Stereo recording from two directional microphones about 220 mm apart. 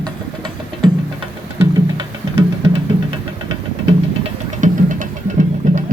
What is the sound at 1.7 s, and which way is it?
Music, 20° right (ahead or behind).